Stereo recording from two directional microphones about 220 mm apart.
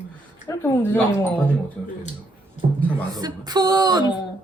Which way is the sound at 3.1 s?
20° right (ahead or behind).